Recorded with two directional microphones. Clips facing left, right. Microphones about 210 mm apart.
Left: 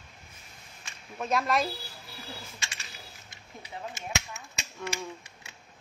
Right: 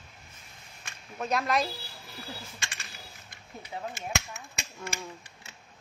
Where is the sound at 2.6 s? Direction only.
55° right (ahead or behind).